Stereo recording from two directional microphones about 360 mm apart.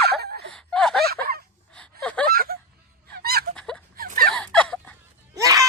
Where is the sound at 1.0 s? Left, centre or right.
Right.